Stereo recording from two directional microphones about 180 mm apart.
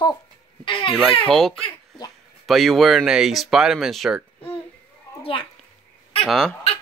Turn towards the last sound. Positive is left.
turn(degrees=0)  # may be behind; listen again after turning